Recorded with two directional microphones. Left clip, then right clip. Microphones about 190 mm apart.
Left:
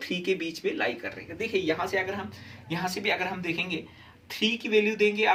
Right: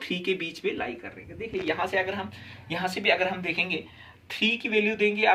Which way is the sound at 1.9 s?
25° right (ahead or behind).